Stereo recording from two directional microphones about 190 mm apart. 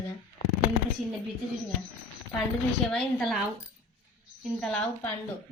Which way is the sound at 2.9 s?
5° left (ahead or behind).